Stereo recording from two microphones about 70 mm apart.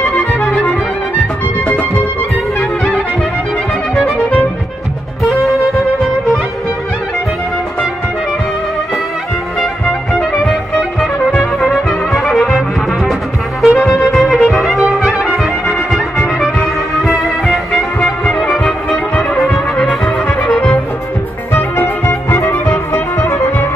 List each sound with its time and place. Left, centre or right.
3.9 s music: centre
11.0 s trumpet: centre
13.1 s music: centre
19.5 s trumpet: centre
21.5 s music: left